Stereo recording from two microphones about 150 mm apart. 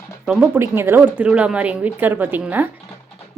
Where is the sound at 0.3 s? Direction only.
5° right (ahead or behind).